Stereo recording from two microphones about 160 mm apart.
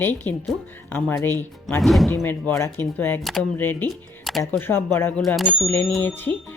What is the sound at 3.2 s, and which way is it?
Speech, centre (ahead or behind).